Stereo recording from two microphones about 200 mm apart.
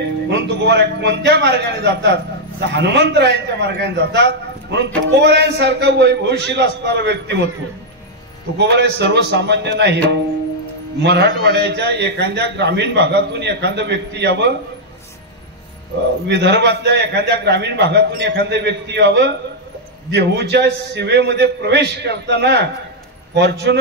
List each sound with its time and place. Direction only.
0.3 s a man's voice: 60° right (ahead or behind)
8.5 s a man's voice: 60° right (ahead or behind)
11.0 s a man's voice: 55° right (ahead or behind)
16.3 s a man's voice: 60° right (ahead or behind)